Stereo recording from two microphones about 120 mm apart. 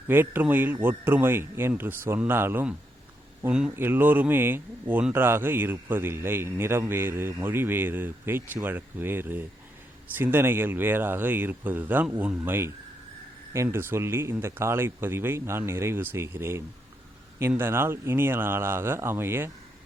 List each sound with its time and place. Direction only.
0.1 s speech: 15° right (ahead or behind)
3.8 s speech: 15° right (ahead or behind)